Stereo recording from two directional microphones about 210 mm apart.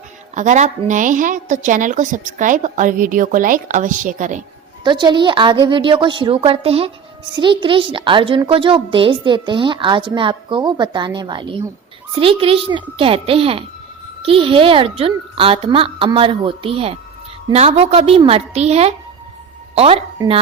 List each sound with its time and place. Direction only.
0.3 s a woman's voice: 35° right (ahead or behind)
4.8 s a woman's voice: 20° right (ahead or behind)